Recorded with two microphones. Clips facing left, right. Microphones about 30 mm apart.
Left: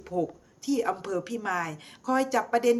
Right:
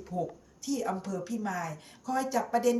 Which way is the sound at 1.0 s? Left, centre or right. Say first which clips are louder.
Left 4 dB; left.